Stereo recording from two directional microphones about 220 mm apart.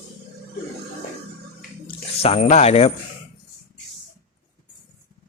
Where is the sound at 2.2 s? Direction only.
30° left (ahead or behind).